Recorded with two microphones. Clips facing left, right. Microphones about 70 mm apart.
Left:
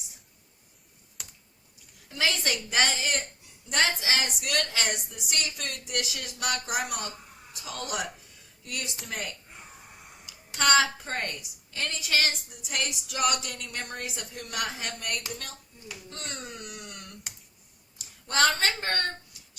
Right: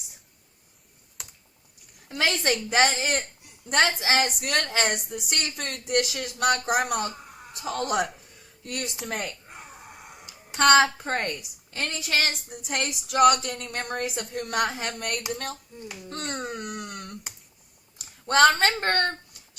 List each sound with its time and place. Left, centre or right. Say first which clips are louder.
2.0 s a woman's voice: right 4 dB; right
10.0 s a sound: right 4 dB; right
10.6 s a woman's voice: right 5 dB; right